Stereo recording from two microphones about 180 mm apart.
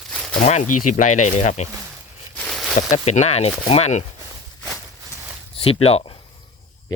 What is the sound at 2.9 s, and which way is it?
Speech, 40° left (ahead or behind).